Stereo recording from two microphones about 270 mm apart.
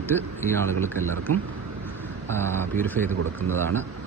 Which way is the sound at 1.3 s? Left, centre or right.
Right.